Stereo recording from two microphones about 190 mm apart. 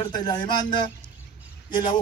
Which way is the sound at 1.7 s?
20° left (ahead or behind).